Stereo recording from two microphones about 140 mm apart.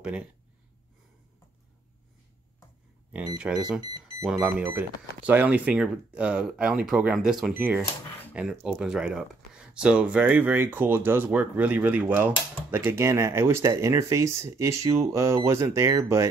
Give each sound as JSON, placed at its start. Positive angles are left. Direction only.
{"t": 0.0, "sound": "speech", "side_deg": -10}
{"t": 3.3, "sound": "speech", "side_deg": -5}
{"t": 3.8, "sound": "a sound", "side_deg": -30}
{"t": 4.4, "sound": "speech", "side_deg": -15}
{"t": 7.5, "sound": "speech", "side_deg": -15}